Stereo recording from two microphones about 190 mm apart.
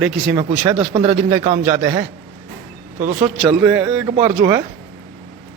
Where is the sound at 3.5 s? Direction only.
10° right (ahead or behind).